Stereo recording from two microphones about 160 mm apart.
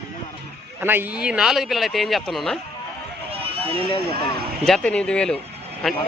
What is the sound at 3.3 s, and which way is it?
Run, 35° right (ahead or behind).